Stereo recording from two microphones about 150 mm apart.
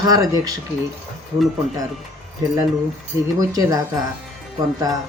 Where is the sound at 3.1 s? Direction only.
20° right (ahead or behind).